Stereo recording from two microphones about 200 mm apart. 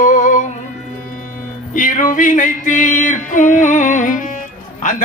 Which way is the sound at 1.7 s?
40° left (ahead or behind).